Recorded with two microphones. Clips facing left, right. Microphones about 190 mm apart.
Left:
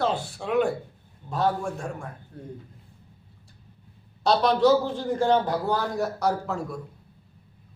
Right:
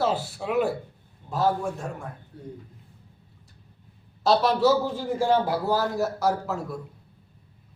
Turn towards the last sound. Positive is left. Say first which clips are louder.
# even
turn(degrees=-5)  # may be behind; listen again after turning